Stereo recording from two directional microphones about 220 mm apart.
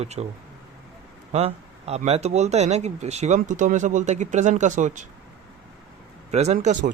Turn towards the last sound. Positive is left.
turn(degrees=-35)  # may be behind; listen again after turning